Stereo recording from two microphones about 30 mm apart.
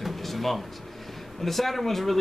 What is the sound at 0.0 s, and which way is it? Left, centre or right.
Drawer open or close, centre.